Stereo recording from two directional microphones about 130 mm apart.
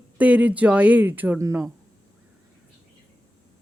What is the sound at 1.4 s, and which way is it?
Speech, 25° right (ahead or behind).